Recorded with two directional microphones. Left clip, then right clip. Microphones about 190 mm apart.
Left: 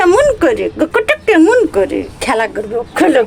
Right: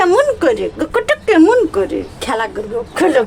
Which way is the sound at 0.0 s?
10° left (ahead or behind).